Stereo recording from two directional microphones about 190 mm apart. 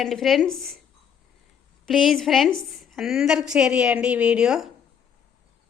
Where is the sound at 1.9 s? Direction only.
Centre (ahead or behind).